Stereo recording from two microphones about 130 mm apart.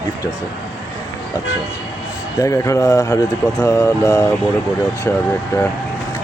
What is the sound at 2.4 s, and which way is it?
Speech, 25° left (ahead or behind).